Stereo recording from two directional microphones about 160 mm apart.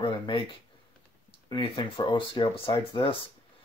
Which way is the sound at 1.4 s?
25° left (ahead or behind).